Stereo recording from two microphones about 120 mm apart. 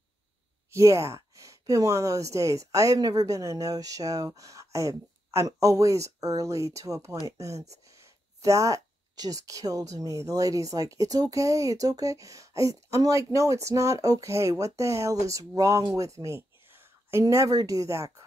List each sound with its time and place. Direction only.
0.7 s speech: 25° right (ahead or behind)
7.5 s speech: 65° right (ahead or behind)
7.9 s speech: 25° right (ahead or behind)